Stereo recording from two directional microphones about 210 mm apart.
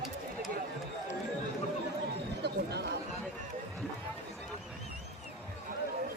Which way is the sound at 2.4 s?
50° right (ahead or behind).